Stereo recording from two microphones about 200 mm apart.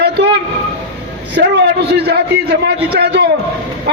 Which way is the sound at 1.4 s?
55° right (ahead or behind).